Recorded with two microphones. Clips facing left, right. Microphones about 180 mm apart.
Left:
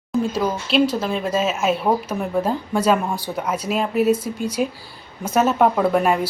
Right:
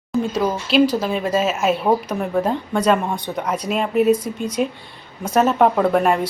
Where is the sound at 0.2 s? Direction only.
Centre (ahead or behind).